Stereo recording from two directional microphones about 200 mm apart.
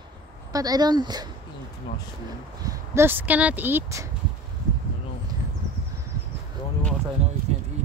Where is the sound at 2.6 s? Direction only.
15° right (ahead or behind).